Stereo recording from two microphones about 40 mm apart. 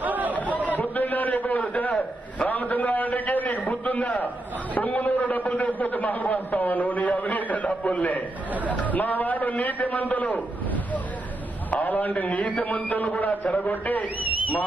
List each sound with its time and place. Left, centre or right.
0.0 s chatter: right
0.7 s a man's voice: left
11.7 s a man's voice: left